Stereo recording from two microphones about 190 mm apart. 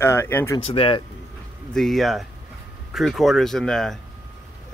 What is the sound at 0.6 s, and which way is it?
Speech, 30° left (ahead or behind).